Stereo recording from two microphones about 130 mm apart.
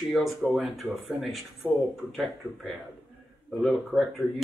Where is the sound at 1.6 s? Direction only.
20° right (ahead or behind).